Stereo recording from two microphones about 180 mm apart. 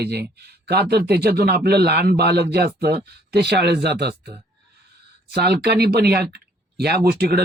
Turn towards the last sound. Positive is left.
turn(degrees=-65)  # may be behind; listen again after turning